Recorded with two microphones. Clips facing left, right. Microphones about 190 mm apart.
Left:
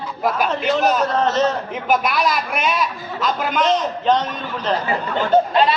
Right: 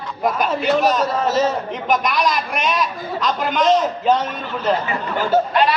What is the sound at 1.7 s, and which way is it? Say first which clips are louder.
A man's voice: even; 5° left (ahead or behind).